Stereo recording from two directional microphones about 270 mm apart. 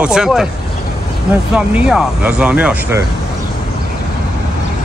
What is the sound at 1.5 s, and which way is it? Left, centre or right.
Speech, centre.